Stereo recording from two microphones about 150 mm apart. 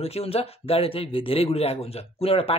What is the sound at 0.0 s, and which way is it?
A man's voice, 40° left (ahead or behind).